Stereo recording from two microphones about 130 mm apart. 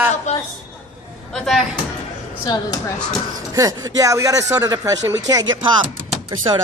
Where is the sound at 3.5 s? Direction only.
25° right (ahead or behind).